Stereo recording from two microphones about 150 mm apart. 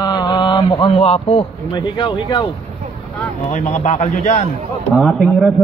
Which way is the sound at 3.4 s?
50° left (ahead or behind).